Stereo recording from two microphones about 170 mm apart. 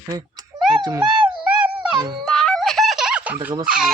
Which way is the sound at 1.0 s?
5° right (ahead or behind).